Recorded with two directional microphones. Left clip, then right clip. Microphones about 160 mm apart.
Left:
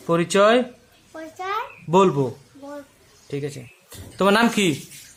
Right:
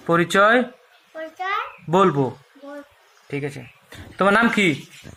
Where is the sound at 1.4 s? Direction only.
25° left (ahead or behind).